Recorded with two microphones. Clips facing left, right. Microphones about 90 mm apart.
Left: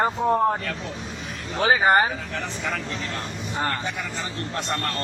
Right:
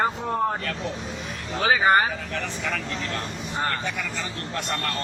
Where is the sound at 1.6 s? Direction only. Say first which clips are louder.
Left 1 dB; 35° left (ahead or behind).